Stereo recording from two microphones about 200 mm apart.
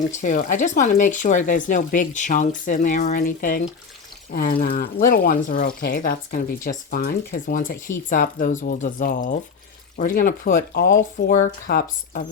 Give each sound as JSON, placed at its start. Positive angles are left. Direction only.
{"t": 0.2, "sound": "speech", "side_deg": 40}